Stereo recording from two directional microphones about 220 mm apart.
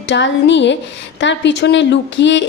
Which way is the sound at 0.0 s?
55° left (ahead or behind).